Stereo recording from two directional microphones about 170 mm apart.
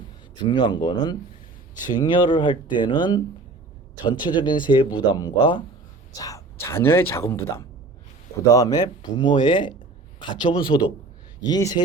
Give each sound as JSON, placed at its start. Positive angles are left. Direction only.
{"t": 0.3, "sound": "speech", "side_deg": 25}
{"t": 2.0, "sound": "speech", "side_deg": 25}